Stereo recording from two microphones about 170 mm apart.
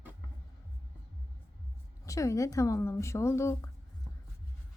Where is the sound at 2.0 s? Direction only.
20° left (ahead or behind).